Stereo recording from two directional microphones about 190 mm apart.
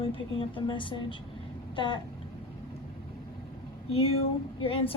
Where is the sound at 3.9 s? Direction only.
35° left (ahead or behind).